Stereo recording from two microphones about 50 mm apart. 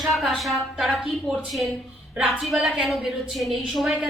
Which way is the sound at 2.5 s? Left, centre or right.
Centre.